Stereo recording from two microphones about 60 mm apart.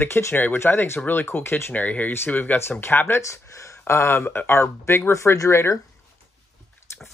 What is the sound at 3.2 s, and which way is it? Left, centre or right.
Speech, left.